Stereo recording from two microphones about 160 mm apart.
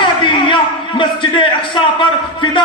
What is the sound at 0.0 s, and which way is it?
A man's voice, 30° left (ahead or behind).